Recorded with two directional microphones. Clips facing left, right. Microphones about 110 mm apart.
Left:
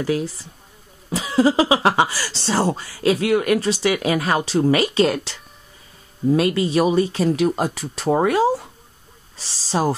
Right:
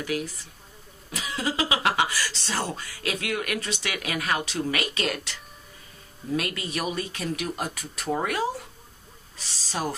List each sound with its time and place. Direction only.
0.0 s speech: 30° left (ahead or behind)